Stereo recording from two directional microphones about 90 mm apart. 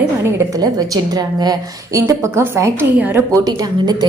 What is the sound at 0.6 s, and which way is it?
A woman's voice, 45° right (ahead or behind).